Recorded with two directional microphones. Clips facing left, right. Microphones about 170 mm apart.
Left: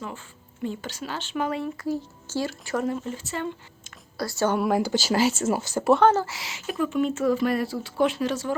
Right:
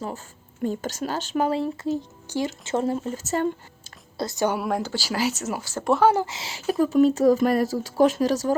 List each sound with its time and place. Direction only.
0.0 s speech: 40° right (ahead or behind)
3.2 s speech: 40° right (ahead or behind)
4.2 s a woman's voice: 20° right (ahead or behind)
4.5 s speech: centre (ahead or behind)
4.8 s speech: 20° left (ahead or behind)
5.7 s speech: 5° left (ahead or behind)
6.0 s speech: 15° right (ahead or behind)
6.5 s speech: 35° right (ahead or behind)